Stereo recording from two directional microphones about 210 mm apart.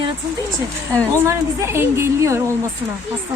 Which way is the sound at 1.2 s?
10° right (ahead or behind).